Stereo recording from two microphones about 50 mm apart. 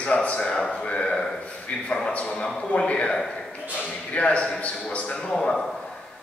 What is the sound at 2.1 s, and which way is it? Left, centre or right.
A man's voice, left.